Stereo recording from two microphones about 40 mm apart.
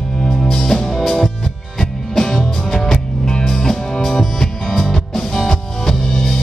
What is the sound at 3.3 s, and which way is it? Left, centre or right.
Music, centre.